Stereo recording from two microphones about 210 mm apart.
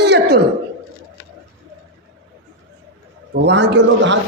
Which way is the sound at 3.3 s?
55° right (ahead or behind).